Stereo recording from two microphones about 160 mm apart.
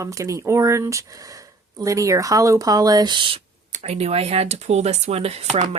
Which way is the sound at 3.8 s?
40° right (ahead or behind).